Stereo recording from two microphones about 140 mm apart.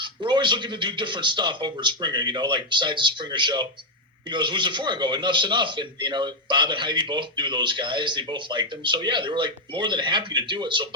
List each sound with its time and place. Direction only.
0.0 s speech: 35° right (ahead or behind)